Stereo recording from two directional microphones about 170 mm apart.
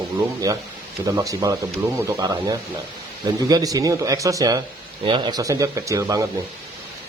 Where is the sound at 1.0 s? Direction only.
20° right (ahead or behind).